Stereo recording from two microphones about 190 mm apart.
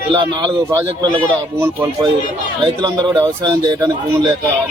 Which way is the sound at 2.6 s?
20° right (ahead or behind).